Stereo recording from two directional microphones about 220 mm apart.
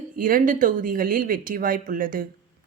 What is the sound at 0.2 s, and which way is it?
Speech, 40° right (ahead or behind).